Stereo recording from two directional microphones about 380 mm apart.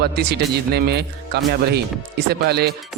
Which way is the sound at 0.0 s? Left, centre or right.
Right.